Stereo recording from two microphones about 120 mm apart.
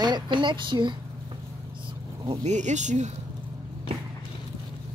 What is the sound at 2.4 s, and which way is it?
Speech, 80° right.